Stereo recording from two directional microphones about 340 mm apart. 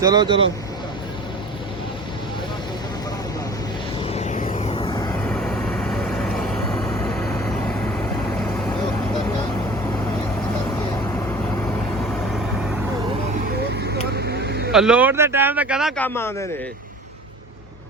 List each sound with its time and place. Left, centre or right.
0.0 s speech: centre
4.0 s vehicle: centre
13.8 s vehicle: right
14.7 s speech: centre